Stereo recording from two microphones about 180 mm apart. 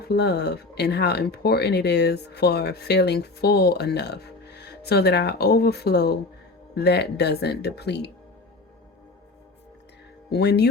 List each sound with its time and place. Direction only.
0.0 s speech: 65° left (ahead or behind)
10.2 s speech: 65° left (ahead or behind)